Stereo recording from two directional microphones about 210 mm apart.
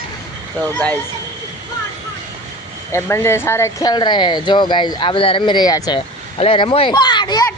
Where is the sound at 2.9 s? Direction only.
10° left (ahead or behind).